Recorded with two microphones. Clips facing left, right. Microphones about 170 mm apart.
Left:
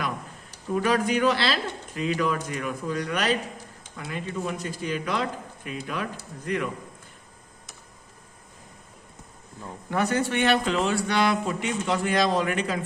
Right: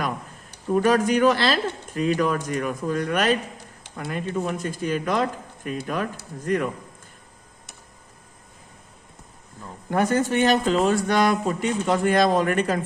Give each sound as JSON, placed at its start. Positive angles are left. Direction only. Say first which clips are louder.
{"t": 0.7, "sound": "speech", "louder": "right 4 dB", "side_deg": -45}
{"t": 9.9, "sound": "speech", "louder": "right 4 dB", "side_deg": -45}